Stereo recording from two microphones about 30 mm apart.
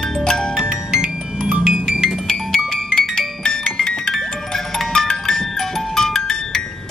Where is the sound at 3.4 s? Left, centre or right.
Left.